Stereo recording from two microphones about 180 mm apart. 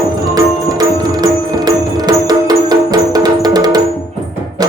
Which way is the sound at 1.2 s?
20° right (ahead or behind).